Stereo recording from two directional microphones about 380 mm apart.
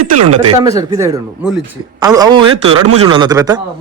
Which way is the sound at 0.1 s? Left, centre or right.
Right.